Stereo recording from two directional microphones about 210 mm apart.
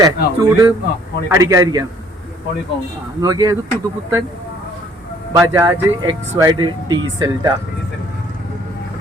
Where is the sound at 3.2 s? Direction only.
15° right (ahead or behind).